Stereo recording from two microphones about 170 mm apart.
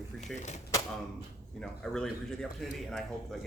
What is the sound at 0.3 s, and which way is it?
Speech, 45° left (ahead or behind).